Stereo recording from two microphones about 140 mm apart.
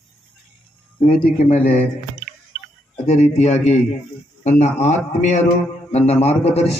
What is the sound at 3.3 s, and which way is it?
Speech, 55° left (ahead or behind).